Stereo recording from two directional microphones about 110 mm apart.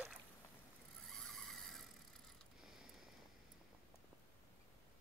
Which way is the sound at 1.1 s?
5° left (ahead or behind).